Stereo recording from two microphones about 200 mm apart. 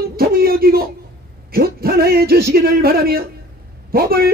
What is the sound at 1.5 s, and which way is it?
A man's voice, 50° right (ahead or behind).